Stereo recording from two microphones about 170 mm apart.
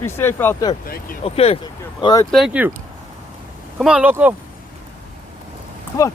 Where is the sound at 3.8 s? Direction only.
5° right (ahead or behind).